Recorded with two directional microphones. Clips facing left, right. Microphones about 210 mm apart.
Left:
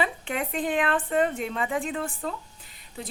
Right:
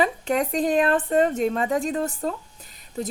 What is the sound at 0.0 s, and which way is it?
A woman's voice, 40° right (ahead or behind).